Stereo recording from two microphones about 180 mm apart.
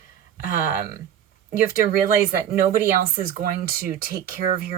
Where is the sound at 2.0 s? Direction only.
50° right (ahead or behind).